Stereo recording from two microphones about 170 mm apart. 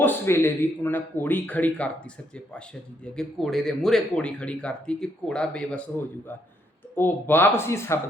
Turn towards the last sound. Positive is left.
turn(degrees=15)  # may be behind; listen again after turning